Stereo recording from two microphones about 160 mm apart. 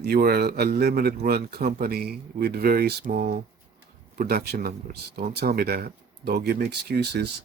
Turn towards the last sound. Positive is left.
turn(degrees=-85)